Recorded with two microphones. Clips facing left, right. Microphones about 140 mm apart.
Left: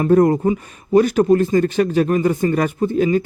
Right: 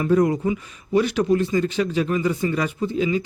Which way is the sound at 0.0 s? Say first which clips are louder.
Left 5 dB; 50° left (ahead or behind).